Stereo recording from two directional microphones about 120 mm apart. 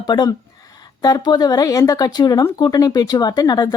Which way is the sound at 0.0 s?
35° left (ahead or behind).